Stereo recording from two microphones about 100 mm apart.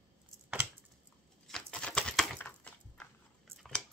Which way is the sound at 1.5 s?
5° left (ahead or behind).